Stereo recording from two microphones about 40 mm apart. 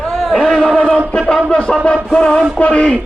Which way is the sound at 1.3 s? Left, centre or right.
Left.